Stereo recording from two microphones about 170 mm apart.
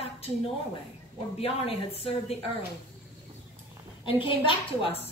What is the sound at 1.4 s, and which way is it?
A woman's voice, 35° left (ahead or behind).